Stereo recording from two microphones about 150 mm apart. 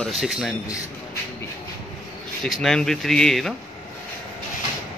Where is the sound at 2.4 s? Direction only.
5° left (ahead or behind).